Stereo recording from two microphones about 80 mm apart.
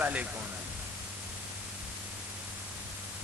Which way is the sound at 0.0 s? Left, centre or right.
Centre.